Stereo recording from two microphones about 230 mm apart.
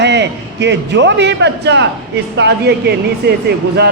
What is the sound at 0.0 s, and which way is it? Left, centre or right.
A man's voice, right.